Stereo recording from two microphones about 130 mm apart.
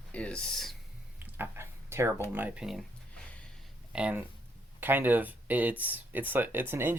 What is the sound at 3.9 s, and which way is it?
Speech, 10° right (ahead or behind).